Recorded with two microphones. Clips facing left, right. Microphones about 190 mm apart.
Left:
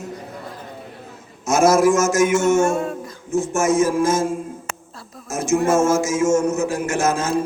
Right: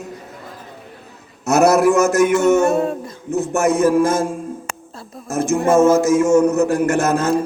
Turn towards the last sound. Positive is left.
turn(degrees=-60)  # may be behind; listen again after turning